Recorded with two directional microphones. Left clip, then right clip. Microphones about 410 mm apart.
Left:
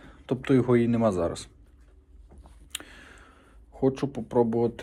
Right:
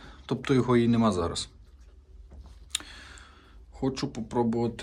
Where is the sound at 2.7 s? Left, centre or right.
Centre.